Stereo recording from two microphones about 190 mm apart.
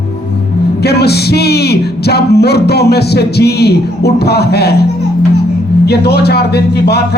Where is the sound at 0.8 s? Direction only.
60° left (ahead or behind).